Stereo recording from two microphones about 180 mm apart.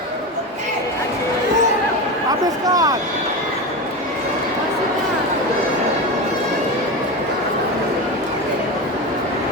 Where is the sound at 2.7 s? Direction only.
20° right (ahead or behind).